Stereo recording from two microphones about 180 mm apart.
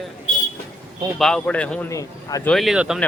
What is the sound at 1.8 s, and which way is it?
Speech, 20° left (ahead or behind).